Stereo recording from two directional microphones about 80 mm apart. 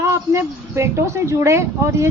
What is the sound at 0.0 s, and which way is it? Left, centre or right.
Speech, right.